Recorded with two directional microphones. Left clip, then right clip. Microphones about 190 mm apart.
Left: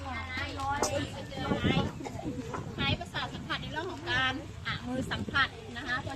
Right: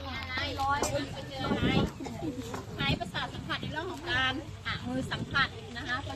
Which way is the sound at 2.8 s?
10° right (ahead or behind).